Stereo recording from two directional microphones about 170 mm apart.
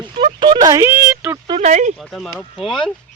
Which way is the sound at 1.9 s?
Centre (ahead or behind).